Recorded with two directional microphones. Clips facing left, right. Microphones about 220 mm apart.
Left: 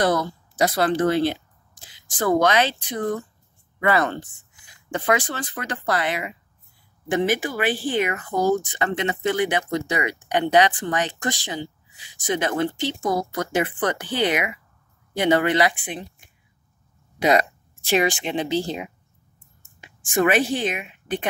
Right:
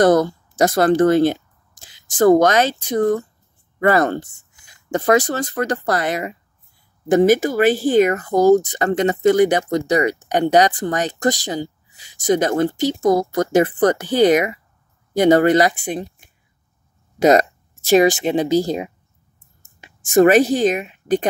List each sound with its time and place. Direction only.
0.0 s speech: 45° right (ahead or behind)
17.2 s speech: 45° right (ahead or behind)